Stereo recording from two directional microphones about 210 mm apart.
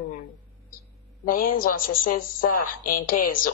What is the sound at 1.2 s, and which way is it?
A woman's voice, 40° left (ahead or behind).